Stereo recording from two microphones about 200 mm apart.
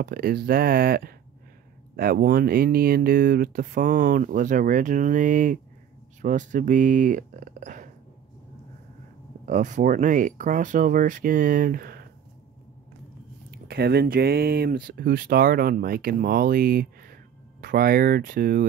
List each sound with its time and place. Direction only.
0.0 s speech: 50° right (ahead or behind)
9.5 s speech: 40° right (ahead or behind)
13.5 s speech: 50° right (ahead or behind)